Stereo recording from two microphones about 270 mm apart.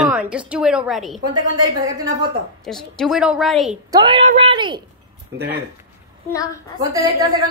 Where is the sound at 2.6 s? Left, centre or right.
Centre.